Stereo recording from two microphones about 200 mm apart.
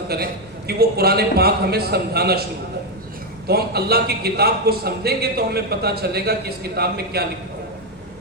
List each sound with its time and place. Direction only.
0.1 s a man's voice: 50° right (ahead or behind)
3.4 s a man's voice: 50° right (ahead or behind)